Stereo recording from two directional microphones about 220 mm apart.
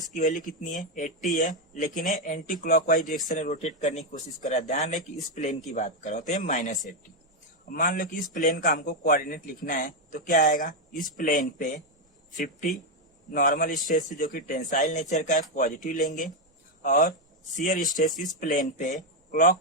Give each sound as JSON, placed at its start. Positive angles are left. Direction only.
{"t": 0.1, "sound": "a man's voice", "side_deg": 35}
{"t": 7.8, "sound": "a man's voice", "side_deg": 40}